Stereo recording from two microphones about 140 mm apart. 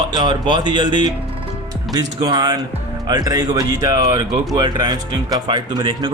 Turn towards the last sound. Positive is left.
turn(degrees=-30)  # may be behind; listen again after turning